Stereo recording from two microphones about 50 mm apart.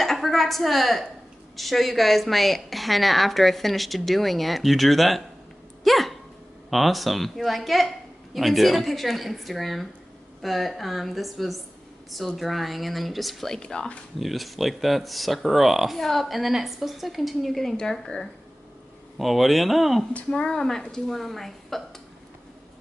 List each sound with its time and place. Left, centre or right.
0.0 s a sound: centre
1.6 s a woman's voice: centre
5.9 s hiccup: centre
6.7 s a woman's voice: centre
13.5 s speech: centre
14.2 s a woman's voice: centre
18.0 s speech: centre
19.1 s a woman's voice: centre
20.2 s a woman's voice: centre
20.6 s a woman's voice: centre